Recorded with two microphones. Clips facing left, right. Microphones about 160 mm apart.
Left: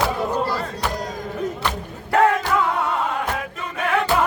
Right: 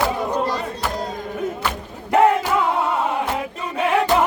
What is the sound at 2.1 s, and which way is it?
Music, 20° right (ahead or behind).